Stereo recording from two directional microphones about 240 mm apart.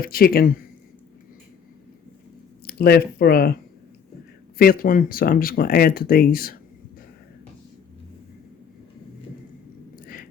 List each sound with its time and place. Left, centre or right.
0.0 s speech: left
2.6 s speech: left
4.5 s speech: left